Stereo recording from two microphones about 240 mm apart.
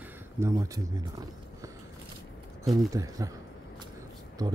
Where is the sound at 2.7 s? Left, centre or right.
Centre.